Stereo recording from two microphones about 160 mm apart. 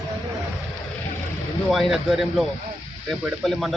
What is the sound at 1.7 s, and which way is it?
Speech, centre (ahead or behind).